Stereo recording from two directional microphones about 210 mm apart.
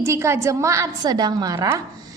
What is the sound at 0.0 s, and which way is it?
A woman's voice, 15° right (ahead or behind).